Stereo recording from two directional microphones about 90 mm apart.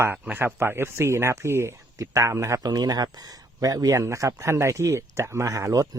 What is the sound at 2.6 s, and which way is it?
Speech, 45° right (ahead or behind).